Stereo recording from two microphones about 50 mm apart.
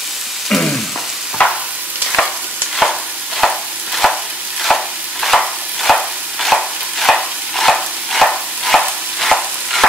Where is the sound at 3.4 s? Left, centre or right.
Centre.